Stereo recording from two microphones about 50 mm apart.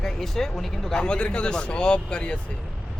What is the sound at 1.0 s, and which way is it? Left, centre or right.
Speech, centre.